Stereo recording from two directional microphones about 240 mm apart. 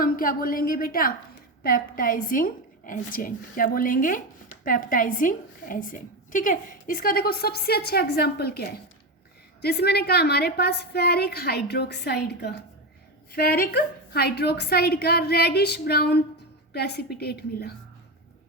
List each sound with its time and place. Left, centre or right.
0.0 s a woman's voice: left